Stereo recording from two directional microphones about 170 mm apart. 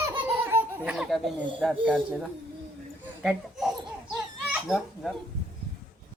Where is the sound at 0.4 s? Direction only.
15° right (ahead or behind).